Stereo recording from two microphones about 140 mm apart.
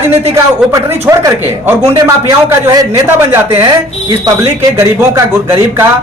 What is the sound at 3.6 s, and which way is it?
Speech, 30° right (ahead or behind).